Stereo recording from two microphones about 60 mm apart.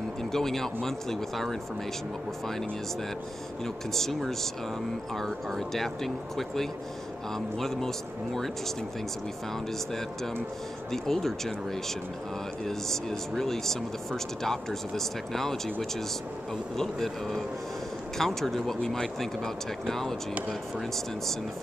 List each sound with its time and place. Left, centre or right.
0.2 s speech: centre
3.6 s speech: centre
10.9 s speech: centre
12.6 s speech: centre